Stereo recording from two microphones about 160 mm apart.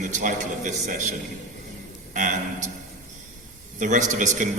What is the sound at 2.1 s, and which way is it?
Speech, 50° right (ahead or behind).